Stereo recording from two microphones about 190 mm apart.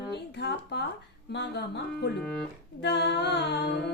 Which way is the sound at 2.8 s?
60° left (ahead or behind).